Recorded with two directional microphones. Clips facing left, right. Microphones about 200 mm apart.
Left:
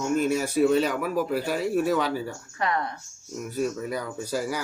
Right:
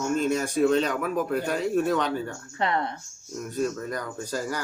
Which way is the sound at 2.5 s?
25° right (ahead or behind).